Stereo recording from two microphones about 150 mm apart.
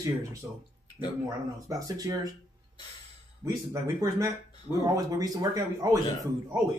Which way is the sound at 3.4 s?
20° right (ahead or behind).